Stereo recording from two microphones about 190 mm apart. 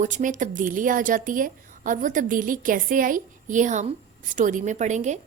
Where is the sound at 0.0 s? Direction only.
40° right (ahead or behind).